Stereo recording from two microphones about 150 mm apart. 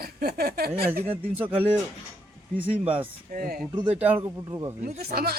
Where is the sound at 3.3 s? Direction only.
75° right (ahead or behind).